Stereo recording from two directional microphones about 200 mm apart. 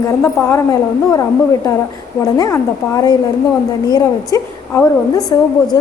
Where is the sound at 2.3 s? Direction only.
15° left (ahead or behind).